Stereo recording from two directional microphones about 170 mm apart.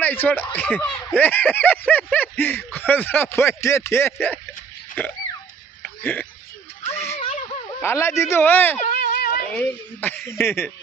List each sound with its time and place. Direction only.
0.0 s speech: 10° left (ahead or behind)
5.8 s throat clearing: 10° left (ahead or behind)
6.9 s a sound: 15° left (ahead or behind)
7.8 s speech: 15° left (ahead or behind)
9.0 s a sound: 65° left (ahead or behind)
9.5 s speech: 10° left (ahead or behind)